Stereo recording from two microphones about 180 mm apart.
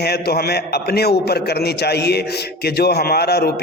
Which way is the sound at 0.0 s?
60° left (ahead or behind).